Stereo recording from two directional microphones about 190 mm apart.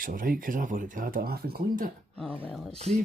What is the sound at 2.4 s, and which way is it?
Speech, centre (ahead or behind).